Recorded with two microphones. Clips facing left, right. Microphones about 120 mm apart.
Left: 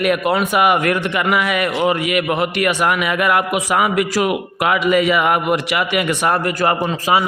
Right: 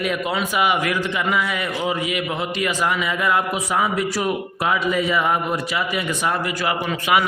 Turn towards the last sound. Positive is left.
turn(degrees=30)  # may be behind; listen again after turning